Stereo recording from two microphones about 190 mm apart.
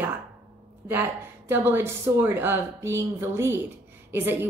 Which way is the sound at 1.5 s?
10° right (ahead or behind).